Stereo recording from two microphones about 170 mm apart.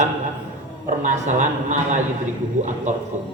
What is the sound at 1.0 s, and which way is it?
A man's voice, 45° right (ahead or behind).